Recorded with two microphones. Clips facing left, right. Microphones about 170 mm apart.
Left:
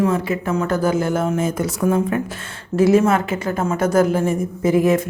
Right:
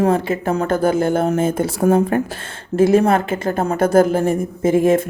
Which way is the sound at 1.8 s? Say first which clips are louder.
Right 4 dB; 40° right (ahead or behind).